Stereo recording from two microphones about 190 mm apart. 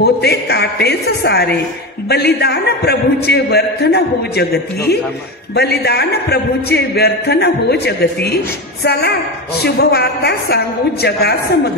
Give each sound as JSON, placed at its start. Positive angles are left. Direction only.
{"t": 0.0, "sound": "a man's voice", "side_deg": 60}